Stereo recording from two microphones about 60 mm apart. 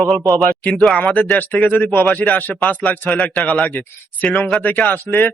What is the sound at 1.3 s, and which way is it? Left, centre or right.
Speech, left.